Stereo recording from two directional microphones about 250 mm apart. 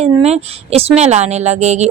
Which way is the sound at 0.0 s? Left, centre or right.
Right.